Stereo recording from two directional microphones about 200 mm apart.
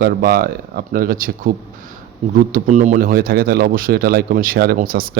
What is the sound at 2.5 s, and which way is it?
Speech, 35° right (ahead or behind).